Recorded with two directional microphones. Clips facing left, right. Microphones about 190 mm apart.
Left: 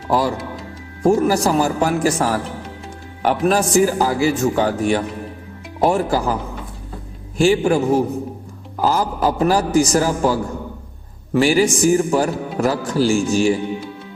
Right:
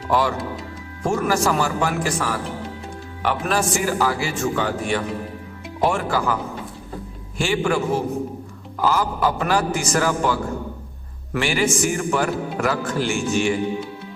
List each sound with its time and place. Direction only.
1.0 s a man's voice: 35° left (ahead or behind)
7.3 s a man's voice: 40° left (ahead or behind)